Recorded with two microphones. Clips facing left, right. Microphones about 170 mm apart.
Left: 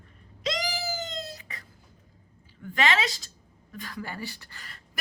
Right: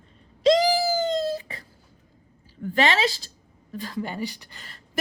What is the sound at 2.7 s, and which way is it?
A woman's voice, 30° right (ahead or behind).